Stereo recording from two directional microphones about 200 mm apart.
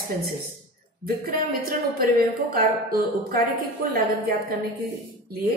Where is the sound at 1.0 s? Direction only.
50° right (ahead or behind).